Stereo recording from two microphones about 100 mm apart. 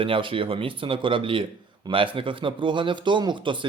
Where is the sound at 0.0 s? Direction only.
60° right (ahead or behind).